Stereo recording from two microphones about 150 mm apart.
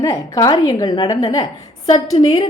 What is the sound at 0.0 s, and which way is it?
Speech, 25° left (ahead or behind).